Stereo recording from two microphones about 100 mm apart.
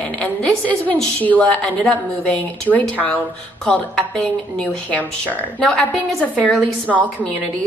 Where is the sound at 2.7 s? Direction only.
15° left (ahead or behind).